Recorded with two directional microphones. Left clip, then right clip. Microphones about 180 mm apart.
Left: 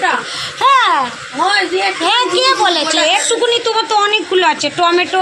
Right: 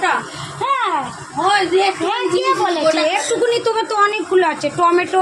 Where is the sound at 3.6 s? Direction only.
20° right (ahead or behind).